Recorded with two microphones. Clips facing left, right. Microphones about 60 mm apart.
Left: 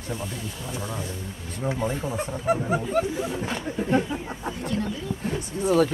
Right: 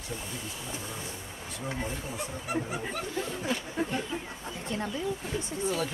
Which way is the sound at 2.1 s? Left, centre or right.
Left.